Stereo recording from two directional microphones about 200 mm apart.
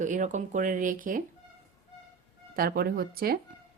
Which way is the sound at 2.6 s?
50° right (ahead or behind).